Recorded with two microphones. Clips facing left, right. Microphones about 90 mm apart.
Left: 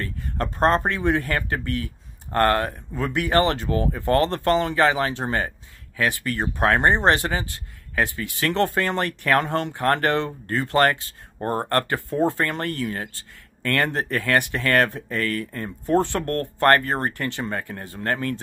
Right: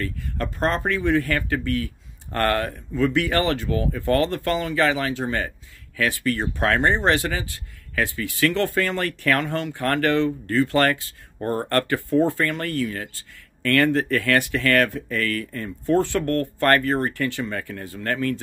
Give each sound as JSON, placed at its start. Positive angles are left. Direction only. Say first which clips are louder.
{"t": 0.0, "sound": "speech", "louder": "even", "side_deg": 30}